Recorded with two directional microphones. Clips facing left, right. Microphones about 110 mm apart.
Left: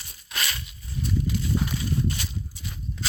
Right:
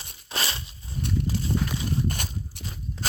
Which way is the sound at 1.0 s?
65° right (ahead or behind).